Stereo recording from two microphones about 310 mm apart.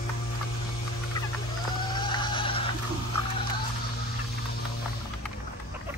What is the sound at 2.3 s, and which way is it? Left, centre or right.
Music, centre.